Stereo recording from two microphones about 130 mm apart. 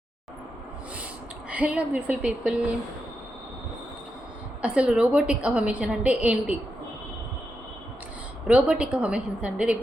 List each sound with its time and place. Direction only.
1.5 s a woman's voice: 10° right (ahead or behind)
4.6 s a woman's voice: 10° right (ahead or behind)
8.4 s a woman's voice: 10° right (ahead or behind)